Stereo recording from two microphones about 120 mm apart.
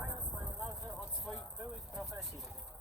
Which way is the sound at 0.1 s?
20° right (ahead or behind).